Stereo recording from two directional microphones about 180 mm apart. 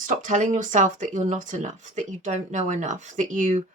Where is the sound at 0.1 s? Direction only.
45° right (ahead or behind).